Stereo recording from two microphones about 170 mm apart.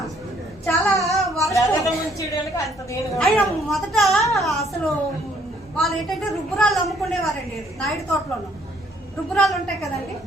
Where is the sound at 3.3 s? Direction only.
Centre (ahead or behind).